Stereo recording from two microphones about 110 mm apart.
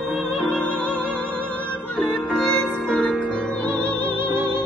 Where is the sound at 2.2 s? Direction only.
Centre (ahead or behind).